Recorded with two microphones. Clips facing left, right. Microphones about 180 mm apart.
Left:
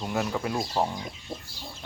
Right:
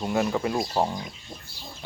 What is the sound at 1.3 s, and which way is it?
Pig, 30° left (ahead or behind).